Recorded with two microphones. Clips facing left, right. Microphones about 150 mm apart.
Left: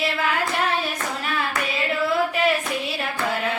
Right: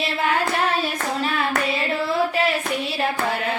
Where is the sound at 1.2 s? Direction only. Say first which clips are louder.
Right 4 dB; 25° right (ahead or behind).